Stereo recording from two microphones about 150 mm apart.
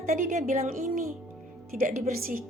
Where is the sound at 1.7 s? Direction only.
70° right (ahead or behind).